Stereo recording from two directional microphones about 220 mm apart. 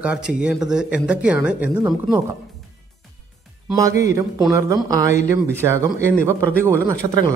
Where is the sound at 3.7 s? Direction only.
15° right (ahead or behind).